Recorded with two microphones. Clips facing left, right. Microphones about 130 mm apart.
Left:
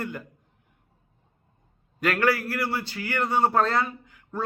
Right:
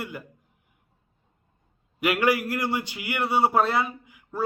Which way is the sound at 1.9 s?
15° right (ahead or behind).